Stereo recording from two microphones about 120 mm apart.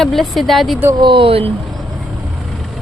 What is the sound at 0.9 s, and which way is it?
Speech, 45° right (ahead or behind).